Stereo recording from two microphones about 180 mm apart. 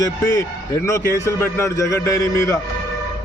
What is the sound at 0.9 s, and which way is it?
Speech, 15° left (ahead or behind).